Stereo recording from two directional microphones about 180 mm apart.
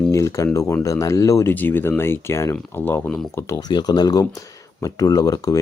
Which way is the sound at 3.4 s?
20° left (ahead or behind).